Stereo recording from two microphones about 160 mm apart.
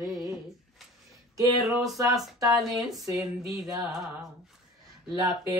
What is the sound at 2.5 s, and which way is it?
Speech, centre (ahead or behind).